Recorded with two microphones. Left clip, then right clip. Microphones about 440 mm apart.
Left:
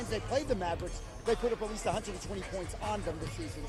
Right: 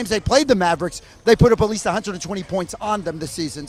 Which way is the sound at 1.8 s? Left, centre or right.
Right.